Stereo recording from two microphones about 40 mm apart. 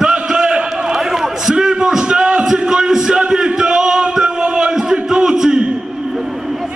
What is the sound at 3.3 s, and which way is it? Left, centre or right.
Music, centre.